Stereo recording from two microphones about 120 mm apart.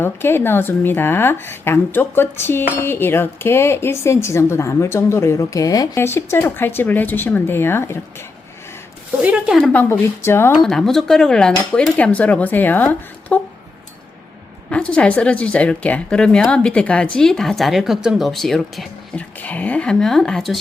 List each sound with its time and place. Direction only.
0.0 s speech: 20° left (ahead or behind)
9.2 s speech: 5° right (ahead or behind)
9.7 s speech: 20° left (ahead or behind)
10.6 s speech: 5° left (ahead or behind)
14.7 s speech: 10° left (ahead or behind)
19.4 s speech: 15° left (ahead or behind)